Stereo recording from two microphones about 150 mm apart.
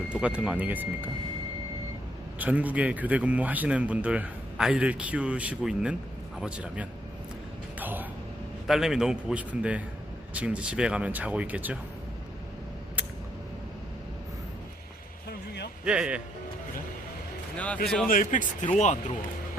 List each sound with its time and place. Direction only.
0.1 s a man's voice: 5° right (ahead or behind)
2.4 s a man's voice: 10° right (ahead or behind)
7.8 s a sound: 10° right (ahead or behind)
8.6 s a man's voice: 5° right (ahead or behind)
15.8 s a man's voice: 5° right (ahead or behind)
17.8 s a man's voice: 5° left (ahead or behind)
18.1 s speech: 60° left (ahead or behind)